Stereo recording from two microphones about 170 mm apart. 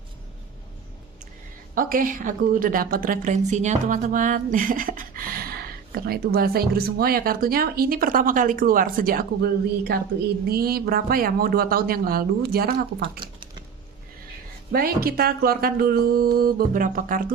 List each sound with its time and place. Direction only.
1.7 s a woman's voice: 55° right (ahead or behind)
13.2 s typing: 25° right (ahead or behind)
14.7 s speech: 60° right (ahead or behind)